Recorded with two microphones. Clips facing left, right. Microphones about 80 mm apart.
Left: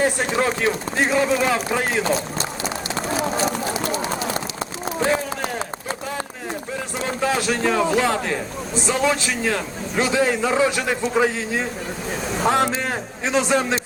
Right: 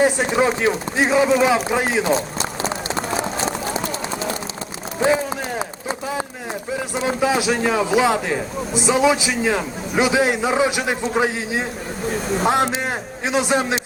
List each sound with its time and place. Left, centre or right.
0.0 s a man's voice: centre
2.1 s run: right
4.9 s a sound: centre
6.7 s a man's voice: centre
12.1 s a man's voice: centre